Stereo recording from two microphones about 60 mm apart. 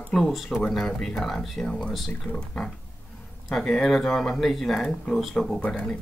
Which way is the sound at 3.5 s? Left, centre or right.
Centre.